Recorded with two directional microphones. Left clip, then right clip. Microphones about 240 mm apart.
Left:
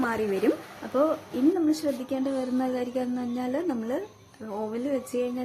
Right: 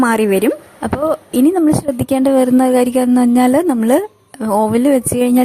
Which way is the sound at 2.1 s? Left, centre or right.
Right.